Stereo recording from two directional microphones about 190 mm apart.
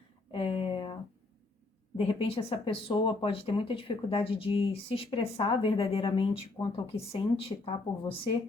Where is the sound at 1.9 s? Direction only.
30° left (ahead or behind).